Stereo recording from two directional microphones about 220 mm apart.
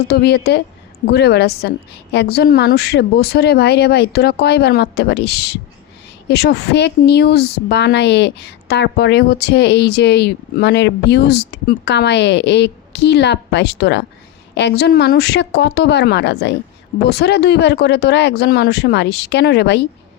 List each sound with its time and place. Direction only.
0.0 s a woman's voice: 45° left (ahead or behind)